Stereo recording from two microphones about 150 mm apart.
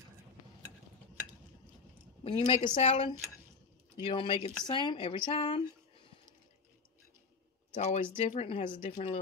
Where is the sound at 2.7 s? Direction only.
40° left (ahead or behind).